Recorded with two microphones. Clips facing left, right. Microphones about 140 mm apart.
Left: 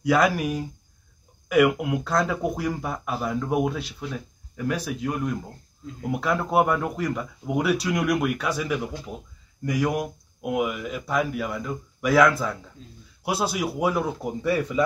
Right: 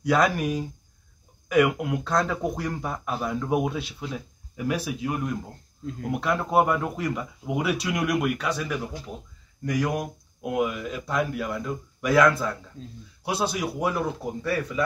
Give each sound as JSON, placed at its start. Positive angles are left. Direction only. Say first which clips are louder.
{"t": 0.0, "sound": "speech", "louder": "left 1 dB", "side_deg": 5}
{"t": 12.8, "sound": "speech", "louder": "right 5 dB", "side_deg": -40}
{"t": 13.2, "sound": "speech", "louder": "left 1 dB", "side_deg": 10}
{"t": 14.4, "sound": "speech", "louder": "left 4 dB", "side_deg": 15}